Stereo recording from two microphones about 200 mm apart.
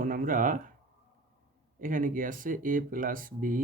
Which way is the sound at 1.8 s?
40° right (ahead or behind).